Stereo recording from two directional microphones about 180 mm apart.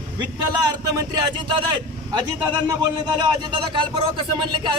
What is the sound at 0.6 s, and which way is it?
Speech, 20° right (ahead or behind).